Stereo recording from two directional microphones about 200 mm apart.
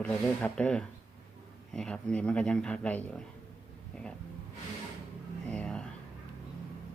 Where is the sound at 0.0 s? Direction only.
5° left (ahead or behind).